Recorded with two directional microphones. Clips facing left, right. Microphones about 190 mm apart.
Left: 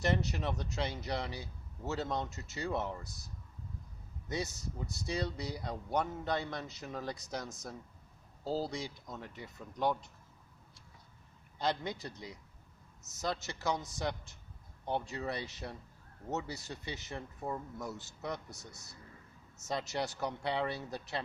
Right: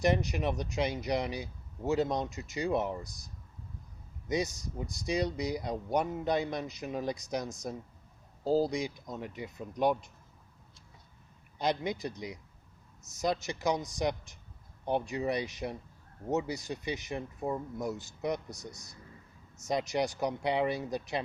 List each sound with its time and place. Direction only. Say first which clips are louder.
0.0 s speech: right 5 dB; 15° right (ahead or behind)
11.5 s speech: right 4 dB; 15° right (ahead or behind)